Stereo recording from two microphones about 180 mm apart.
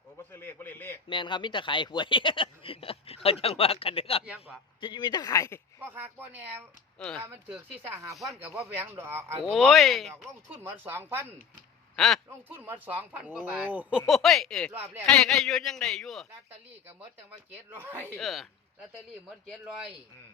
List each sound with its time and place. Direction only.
0.2 s a sound: 10° left (ahead or behind)
1.0 s speech: 25° left (ahead or behind)
4.3 s a man's voice: 5° right (ahead or behind)
4.8 s speech: 25° left (ahead or behind)
5.8 s speech: 10° right (ahead or behind)
9.4 s a man's voice: centre (ahead or behind)
10.2 s speech: 15° right (ahead or behind)
11.9 s speech: centre (ahead or behind)
12.3 s a man's voice: 10° right (ahead or behind); by 14.7 s 5° left (ahead or behind)
14.7 s speech: 15° right (ahead or behind)
15.0 s a man's voice: centre (ahead or behind)
17.7 s speech: 10° right (ahead or behind)
18.2 s a man's voice: centre (ahead or behind)
19.5 s a man's voice: 5° right (ahead or behind)